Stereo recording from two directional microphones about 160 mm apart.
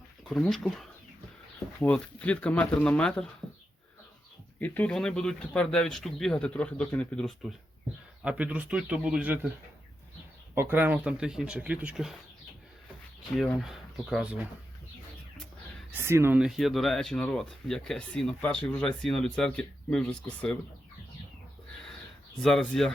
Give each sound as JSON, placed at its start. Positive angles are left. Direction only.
{"t": 0.3, "sound": "speech", "side_deg": 0}
{"t": 4.6, "sound": "speech", "side_deg": 10}
{"t": 8.2, "sound": "speech", "side_deg": -10}
{"t": 10.5, "sound": "speech", "side_deg": -10}
{"t": 13.3, "sound": "speech", "side_deg": 0}
{"t": 15.9, "sound": "speech", "side_deg": -15}
{"t": 16.4, "sound": "speech", "side_deg": 0}
{"t": 22.4, "sound": "speech", "side_deg": 5}